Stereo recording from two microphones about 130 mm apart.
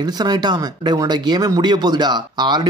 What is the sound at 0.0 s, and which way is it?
Speech, 30° right (ahead or behind).